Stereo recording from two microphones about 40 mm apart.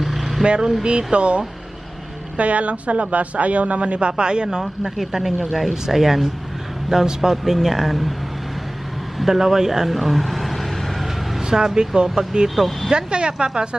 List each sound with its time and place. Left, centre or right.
0.0 s vehicle: centre
0.4 s a woman's voice: right
4.9 s speech: centre
9.1 s vehicle: centre
11.3 s speech: centre
12.5 s speech: centre
12.9 s a woman's voice: right